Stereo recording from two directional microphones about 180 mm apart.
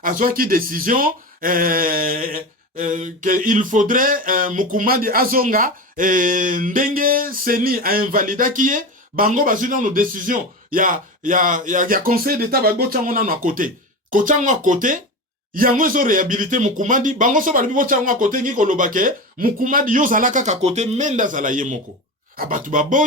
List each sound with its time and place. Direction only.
0.0 s speech: 50° right (ahead or behind)